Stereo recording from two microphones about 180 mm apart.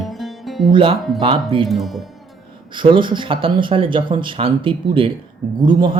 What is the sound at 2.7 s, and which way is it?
Speech, 25° right (ahead or behind).